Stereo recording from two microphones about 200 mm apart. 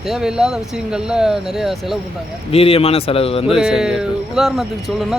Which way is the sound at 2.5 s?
30° left (ahead or behind).